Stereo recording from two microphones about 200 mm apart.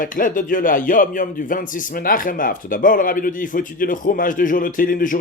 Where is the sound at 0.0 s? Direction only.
40° left (ahead or behind).